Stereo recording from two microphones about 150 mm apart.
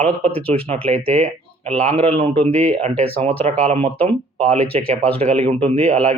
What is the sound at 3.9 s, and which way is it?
Speech, 10° left (ahead or behind).